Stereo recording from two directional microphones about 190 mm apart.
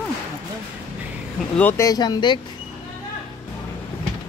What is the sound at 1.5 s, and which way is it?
Speech, 10° left (ahead or behind).